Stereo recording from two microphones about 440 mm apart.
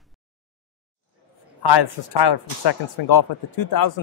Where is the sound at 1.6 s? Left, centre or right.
Left.